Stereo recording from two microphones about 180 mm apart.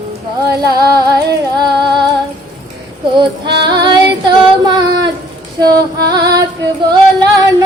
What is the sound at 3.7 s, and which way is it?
Female singing, 25° right (ahead or behind).